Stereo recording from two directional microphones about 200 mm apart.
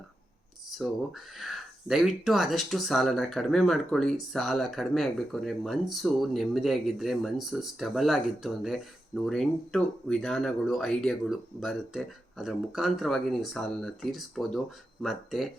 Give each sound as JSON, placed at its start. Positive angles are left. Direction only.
{"t": 0.7, "sound": "speech", "side_deg": 0}